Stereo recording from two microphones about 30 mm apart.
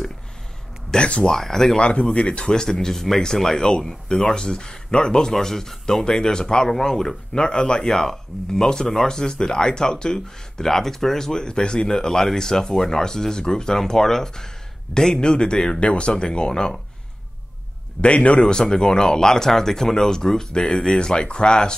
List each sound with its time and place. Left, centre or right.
0.9 s speech: left
1.3 s speech: centre
1.8 s speech: left
2.6 s speech: centre
3.5 s speech: left
3.8 s speech: centre
6.0 s speech: left
7.3 s speech: left
10.6 s speech: centre
11.4 s speech: left
15.8 s speech: left
18.0 s speech: left
18.5 s speech: left